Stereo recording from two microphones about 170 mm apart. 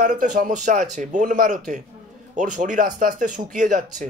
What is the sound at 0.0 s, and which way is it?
Speech, 55° right (ahead or behind).